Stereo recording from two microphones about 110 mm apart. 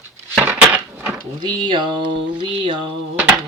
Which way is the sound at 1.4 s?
45° right (ahead or behind).